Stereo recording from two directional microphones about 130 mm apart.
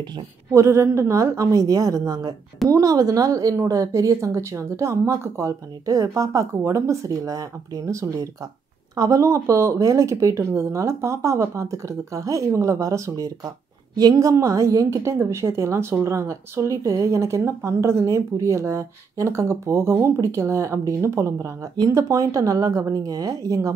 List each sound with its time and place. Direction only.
0.5 s a woman's voice: 20° right (ahead or behind)